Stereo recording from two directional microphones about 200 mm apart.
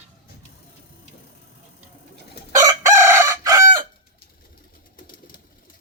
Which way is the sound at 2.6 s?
15° right (ahead or behind).